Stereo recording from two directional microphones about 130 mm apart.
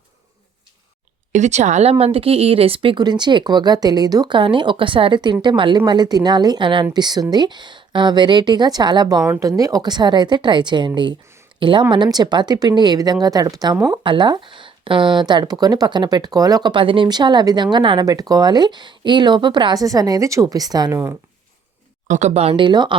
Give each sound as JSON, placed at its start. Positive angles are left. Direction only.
{"t": 1.3, "sound": "speech", "side_deg": -65}
{"t": 22.0, "sound": "speech", "side_deg": -65}
{"t": 22.5, "sound": "speech", "side_deg": -35}